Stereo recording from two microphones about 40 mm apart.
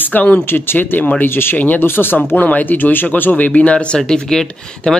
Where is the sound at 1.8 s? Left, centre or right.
Left.